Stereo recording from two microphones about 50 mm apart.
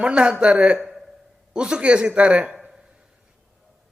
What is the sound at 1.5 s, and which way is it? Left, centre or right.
Speech, centre.